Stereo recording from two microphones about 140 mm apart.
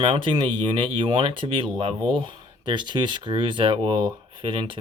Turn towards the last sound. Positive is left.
turn(degrees=-40)  # may be behind; listen again after turning